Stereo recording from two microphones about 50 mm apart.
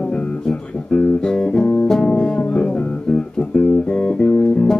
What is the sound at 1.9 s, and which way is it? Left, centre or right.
Music, centre.